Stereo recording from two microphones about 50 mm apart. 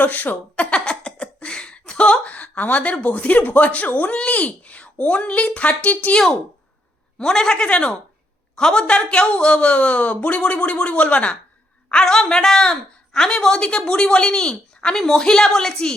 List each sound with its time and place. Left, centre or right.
0.0 s speech: left
0.5 s a sound: left
4.1 s speech: left
7.2 s a woman's voice: centre
11.9 s a woman's voice: centre